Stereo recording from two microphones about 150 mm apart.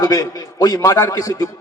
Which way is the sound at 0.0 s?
25° left (ahead or behind).